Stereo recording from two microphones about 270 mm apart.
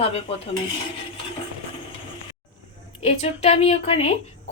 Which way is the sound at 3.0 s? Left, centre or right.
Left.